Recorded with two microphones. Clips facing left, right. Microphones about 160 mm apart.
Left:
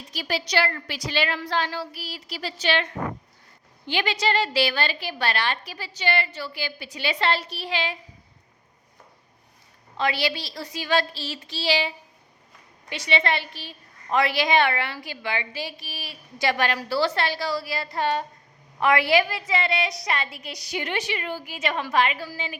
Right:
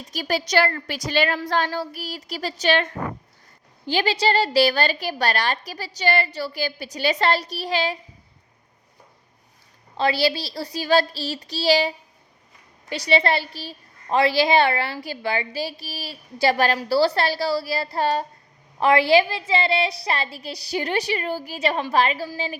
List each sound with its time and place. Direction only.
0.1 s a woman's voice: 45° right (ahead or behind)
10.0 s a woman's voice: 35° right (ahead or behind)